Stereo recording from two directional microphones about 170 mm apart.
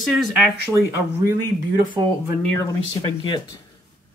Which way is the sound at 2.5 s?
15° left (ahead or behind).